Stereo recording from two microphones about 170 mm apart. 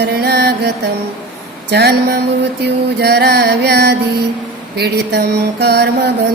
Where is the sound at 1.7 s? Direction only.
70° right (ahead or behind).